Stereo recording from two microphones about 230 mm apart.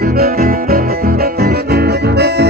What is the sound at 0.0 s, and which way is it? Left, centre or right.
Music, right.